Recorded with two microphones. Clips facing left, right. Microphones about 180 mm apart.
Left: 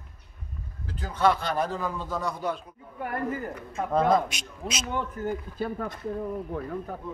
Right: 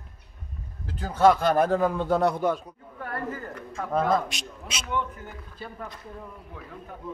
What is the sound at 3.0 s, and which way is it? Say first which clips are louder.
Speech: left 3 dB; 15° left (ahead or behind).